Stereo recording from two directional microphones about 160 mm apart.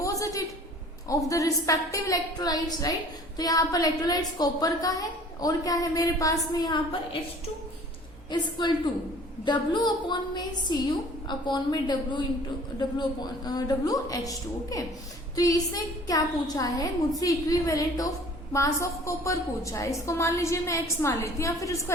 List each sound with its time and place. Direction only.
0.0 s a sound: 20° left (ahead or behind)
1.3 s a woman's voice: 20° left (ahead or behind)
8.3 s a woman's voice: 30° left (ahead or behind)